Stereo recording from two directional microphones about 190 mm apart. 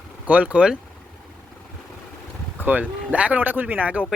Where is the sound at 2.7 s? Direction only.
5° right (ahead or behind).